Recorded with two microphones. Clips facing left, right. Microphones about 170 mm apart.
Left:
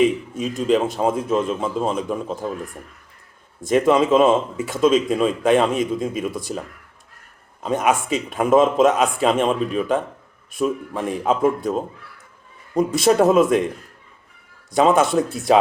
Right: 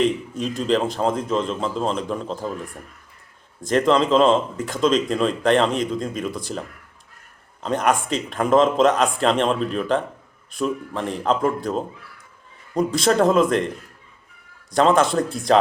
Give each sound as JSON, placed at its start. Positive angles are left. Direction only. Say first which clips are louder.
{"t": 0.0, "sound": "speech", "louder": "left 3 dB", "side_deg": 5}
{"t": 3.6, "sound": "speech", "louder": "left 2 dB", "side_deg": 5}
{"t": 7.6, "sound": "speech", "louder": "left 1 dB", "side_deg": 5}
{"t": 14.7, "sound": "speech", "louder": "left 1 dB", "side_deg": 5}